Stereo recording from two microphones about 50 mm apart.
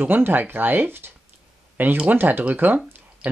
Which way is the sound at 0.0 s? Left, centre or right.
Right.